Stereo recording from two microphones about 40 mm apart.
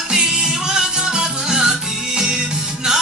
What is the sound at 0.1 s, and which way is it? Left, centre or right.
Music, centre.